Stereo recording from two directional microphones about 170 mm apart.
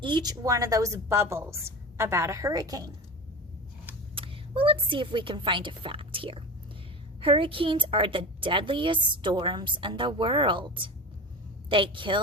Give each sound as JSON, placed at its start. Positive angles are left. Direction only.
{"t": 0.0, "sound": "a woman's voice", "side_deg": -25}
{"t": 4.1, "sound": "a woman's voice", "side_deg": -30}